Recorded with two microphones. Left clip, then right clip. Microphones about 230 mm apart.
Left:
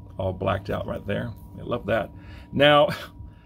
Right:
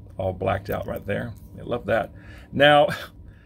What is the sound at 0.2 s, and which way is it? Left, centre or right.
Speech, centre.